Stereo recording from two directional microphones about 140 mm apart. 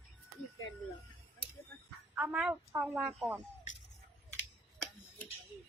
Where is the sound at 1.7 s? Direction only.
10° left (ahead or behind).